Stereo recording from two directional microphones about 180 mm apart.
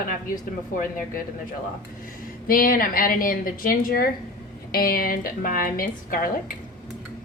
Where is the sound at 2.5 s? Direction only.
50° left (ahead or behind).